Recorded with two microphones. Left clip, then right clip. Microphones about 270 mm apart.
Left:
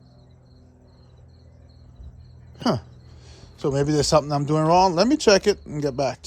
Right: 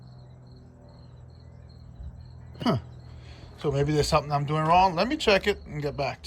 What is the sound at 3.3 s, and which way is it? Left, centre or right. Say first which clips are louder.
A man's voice: left 4 dB; centre.